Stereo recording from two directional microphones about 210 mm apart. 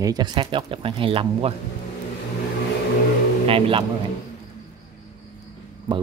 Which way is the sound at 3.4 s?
25° right (ahead or behind).